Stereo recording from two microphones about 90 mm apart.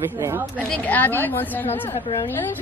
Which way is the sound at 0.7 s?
20° left (ahead or behind).